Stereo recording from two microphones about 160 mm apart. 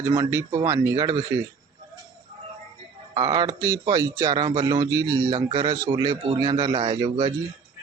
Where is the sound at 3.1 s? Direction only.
25° right (ahead or behind).